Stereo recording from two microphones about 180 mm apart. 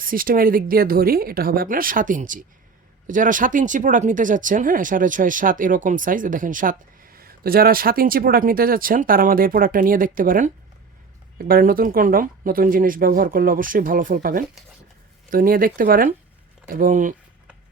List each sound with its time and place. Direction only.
0.0 s speech: 50° right (ahead or behind)